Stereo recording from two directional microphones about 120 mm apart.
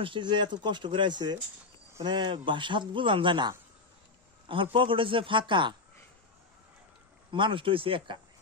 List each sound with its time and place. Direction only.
0.0 s speech: 40° right (ahead or behind)
7.2 s speech: 45° right (ahead or behind)